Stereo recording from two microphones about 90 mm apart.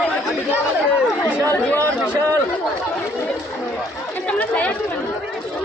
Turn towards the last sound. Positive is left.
turn(degrees=15)  # may be behind; listen again after turning